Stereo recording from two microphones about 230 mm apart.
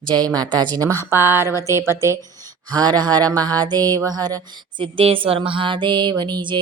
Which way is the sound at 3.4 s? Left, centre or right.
Centre.